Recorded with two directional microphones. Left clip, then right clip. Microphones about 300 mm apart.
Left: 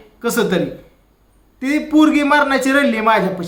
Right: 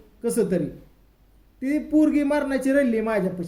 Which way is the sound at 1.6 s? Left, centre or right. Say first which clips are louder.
Left 7 dB; centre.